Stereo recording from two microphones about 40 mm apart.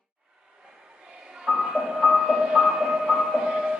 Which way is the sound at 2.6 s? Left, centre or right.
Centre.